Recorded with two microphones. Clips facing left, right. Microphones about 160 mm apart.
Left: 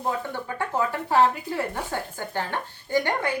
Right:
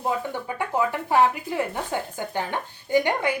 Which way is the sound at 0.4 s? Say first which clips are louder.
Right 2 dB; 15° right (ahead or behind).